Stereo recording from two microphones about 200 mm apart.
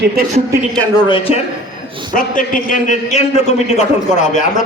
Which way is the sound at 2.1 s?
40° left (ahead or behind).